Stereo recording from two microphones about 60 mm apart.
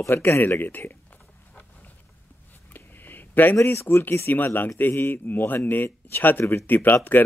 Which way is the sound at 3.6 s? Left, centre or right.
Left.